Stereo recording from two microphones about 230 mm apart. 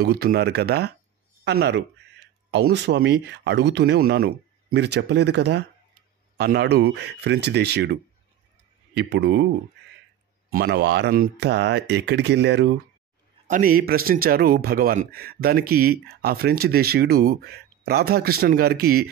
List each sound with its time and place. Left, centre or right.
0.0 s speech: right
10.5 s a man's voice: right